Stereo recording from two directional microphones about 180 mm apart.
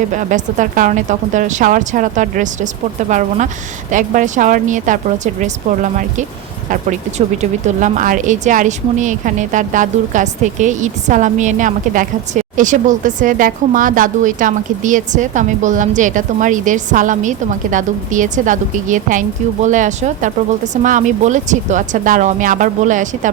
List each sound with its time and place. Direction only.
0.1 s speech: 45° right (ahead or behind)
7.8 s speech: 45° right (ahead or behind)